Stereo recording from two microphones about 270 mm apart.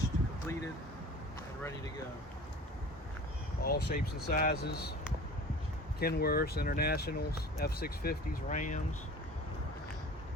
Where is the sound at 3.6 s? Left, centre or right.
Left.